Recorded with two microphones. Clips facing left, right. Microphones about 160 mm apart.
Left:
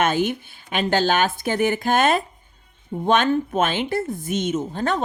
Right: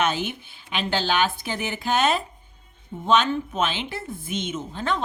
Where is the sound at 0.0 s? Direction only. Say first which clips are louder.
Left 4 dB; 50° left (ahead or behind).